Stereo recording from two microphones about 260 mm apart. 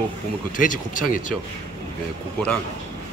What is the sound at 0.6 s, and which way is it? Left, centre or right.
Speech, left.